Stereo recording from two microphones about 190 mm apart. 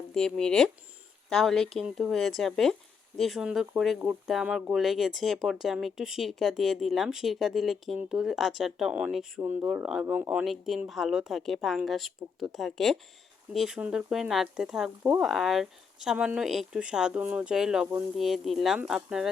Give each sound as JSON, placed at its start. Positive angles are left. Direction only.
{"t": 0.1, "sound": "speech", "side_deg": 5}